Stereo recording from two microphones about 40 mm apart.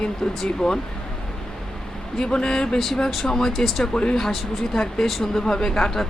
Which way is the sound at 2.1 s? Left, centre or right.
Centre.